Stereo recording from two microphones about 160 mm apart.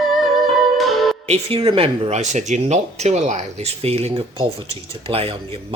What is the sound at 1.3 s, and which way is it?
Speech, 40° right (ahead or behind).